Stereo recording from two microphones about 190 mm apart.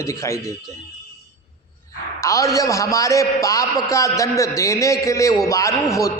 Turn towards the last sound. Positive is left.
turn(degrees=15)  # may be behind; listen again after turning